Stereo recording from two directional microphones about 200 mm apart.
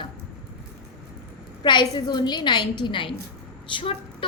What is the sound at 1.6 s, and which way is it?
A woman's voice, 20° left (ahead or behind).